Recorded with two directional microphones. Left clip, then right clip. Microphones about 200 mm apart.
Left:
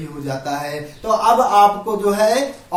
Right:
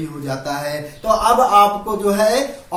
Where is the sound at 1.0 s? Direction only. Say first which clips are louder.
Even; centre (ahead or behind).